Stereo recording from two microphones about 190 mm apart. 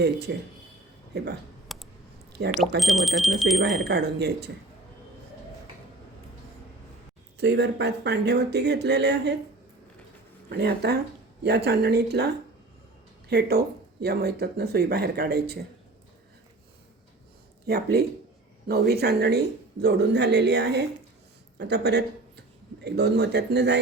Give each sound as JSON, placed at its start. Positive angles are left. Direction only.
{"t": 0.0, "sound": "speech", "side_deg": -60}
{"t": 1.6, "sound": "a sound", "side_deg": 0}
{"t": 2.5, "sound": "speech", "side_deg": 0}
{"t": 3.8, "sound": "speech", "side_deg": -60}
{"t": 7.3, "sound": "speech", "side_deg": -65}
{"t": 10.5, "sound": "speech", "side_deg": -60}
{"t": 17.7, "sound": "speech", "side_deg": -55}